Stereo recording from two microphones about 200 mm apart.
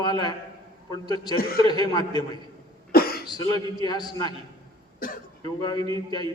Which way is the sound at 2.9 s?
50° left (ahead or behind).